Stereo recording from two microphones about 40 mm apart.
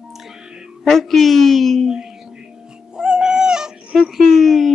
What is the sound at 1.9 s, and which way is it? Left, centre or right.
Music, centre.